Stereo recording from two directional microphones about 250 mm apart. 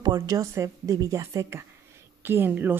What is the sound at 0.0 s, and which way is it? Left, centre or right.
A woman's voice, centre.